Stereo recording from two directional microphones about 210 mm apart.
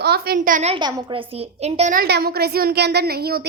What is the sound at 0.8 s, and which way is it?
A woman's voice, 20° right (ahead or behind).